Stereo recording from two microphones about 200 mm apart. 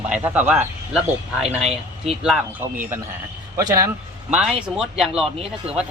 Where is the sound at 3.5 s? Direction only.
15° right (ahead or behind).